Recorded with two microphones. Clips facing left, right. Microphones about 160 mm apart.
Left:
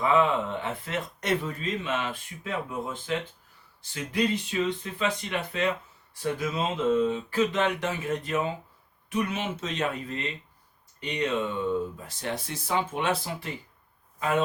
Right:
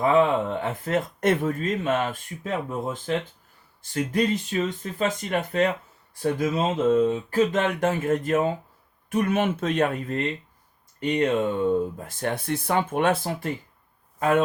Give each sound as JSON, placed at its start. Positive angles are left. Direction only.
{"t": 0.0, "sound": "a man's voice", "side_deg": -45}